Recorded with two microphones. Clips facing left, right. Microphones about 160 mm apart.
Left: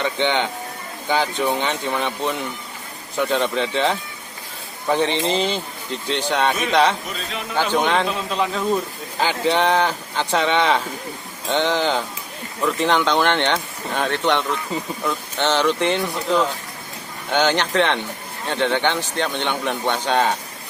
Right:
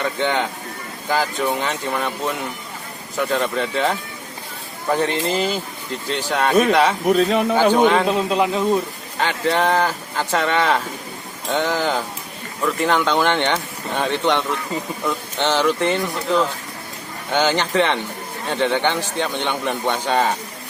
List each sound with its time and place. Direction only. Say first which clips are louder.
0.0 s speech: even; centre (ahead or behind)
7.1 s a man's voice: right 14 dB; 65° right (ahead or behind)
7.7 s a man's voice: right 4 dB; 10° right (ahead or behind)
9.1 s a man's voice: even; centre (ahead or behind)